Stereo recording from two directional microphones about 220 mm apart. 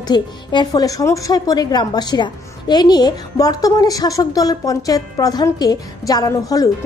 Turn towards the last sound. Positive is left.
turn(degrees=15)  # may be behind; listen again after turning